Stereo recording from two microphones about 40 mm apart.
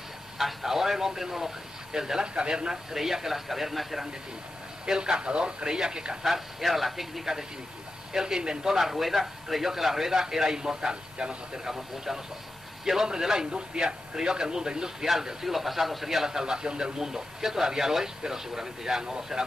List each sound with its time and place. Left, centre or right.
0.4 s a man's voice: centre
4.8 s speech: centre
6.2 s a man's voice: centre
15.0 s speech: centre
16.3 s a man's voice: centre